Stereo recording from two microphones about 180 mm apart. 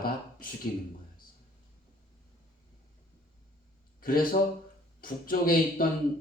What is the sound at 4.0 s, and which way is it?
Speech, 50° left (ahead or behind).